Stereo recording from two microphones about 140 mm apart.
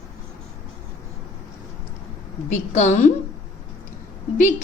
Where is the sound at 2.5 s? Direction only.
55° left (ahead or behind).